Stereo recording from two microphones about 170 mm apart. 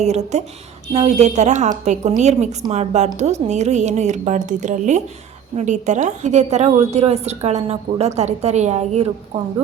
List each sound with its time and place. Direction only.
0.0 s a woman's voice: 40° right (ahead or behind)